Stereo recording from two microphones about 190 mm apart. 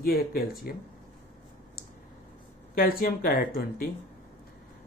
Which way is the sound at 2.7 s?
50° left (ahead or behind).